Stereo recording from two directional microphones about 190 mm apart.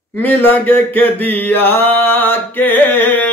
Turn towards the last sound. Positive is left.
turn(degrees=10)  # may be behind; listen again after turning